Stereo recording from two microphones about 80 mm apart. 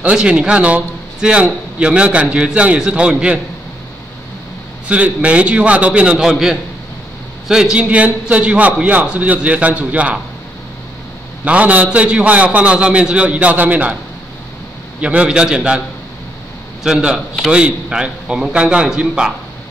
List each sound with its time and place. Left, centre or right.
0.0 s a man's voice: centre
4.8 s a man's voice: centre
11.4 s a man's voice: centre
15.0 s a man's voice: centre
16.8 s a man's voice: centre